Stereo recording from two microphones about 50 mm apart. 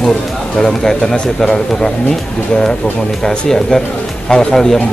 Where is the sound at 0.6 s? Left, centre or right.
Centre.